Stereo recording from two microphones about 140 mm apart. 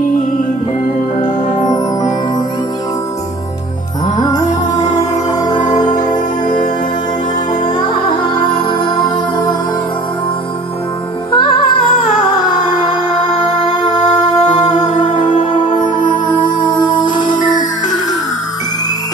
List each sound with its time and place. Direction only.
1.6 s music: 30° left (ahead or behind)
4.2 s music: 25° left (ahead or behind)
8.2 s music: 35° left (ahead or behind)
11.3 s music: 40° left (ahead or behind)
13.8 s music: 30° left (ahead or behind)
16.8 s music: 30° left (ahead or behind)